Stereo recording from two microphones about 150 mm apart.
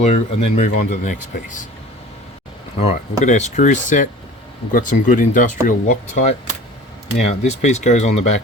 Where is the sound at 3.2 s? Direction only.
55° left (ahead or behind).